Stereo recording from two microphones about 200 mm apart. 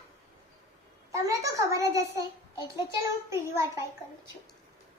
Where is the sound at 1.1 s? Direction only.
15° right (ahead or behind).